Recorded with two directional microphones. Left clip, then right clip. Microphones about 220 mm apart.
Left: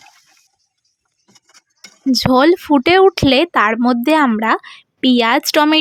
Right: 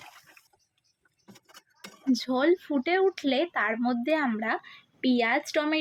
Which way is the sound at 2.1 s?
40° left (ahead or behind).